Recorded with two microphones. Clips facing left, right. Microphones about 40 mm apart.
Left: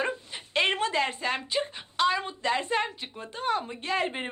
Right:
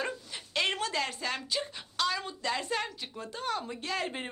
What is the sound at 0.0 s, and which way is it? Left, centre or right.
Speech, left.